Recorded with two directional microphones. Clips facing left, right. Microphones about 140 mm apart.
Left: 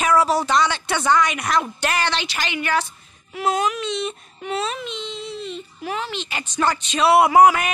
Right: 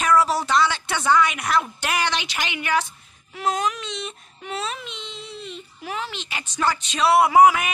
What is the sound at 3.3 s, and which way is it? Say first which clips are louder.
A woman's voice: left 3 dB; 5° left (ahead or behind).